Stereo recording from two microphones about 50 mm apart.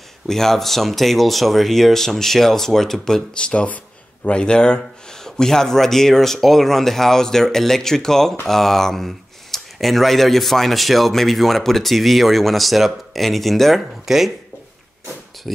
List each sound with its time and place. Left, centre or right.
0.3 s speech: centre
3.3 s speech: centre
15.5 s a sound: centre